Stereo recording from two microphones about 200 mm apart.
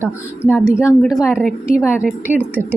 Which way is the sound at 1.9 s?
5° right (ahead or behind).